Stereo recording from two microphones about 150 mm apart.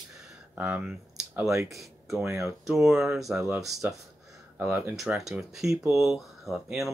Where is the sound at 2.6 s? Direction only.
Centre (ahead or behind).